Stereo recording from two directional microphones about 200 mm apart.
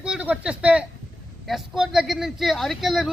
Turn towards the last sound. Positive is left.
turn(degrees=0)  # may be behind; listen again after turning